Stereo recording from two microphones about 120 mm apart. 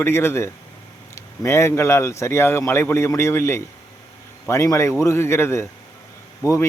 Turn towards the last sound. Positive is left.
turn(degrees=25)  # may be behind; listen again after turning